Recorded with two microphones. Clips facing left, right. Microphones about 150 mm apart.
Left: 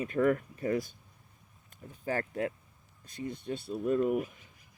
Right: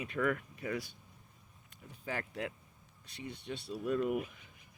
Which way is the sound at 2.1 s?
45° left (ahead or behind).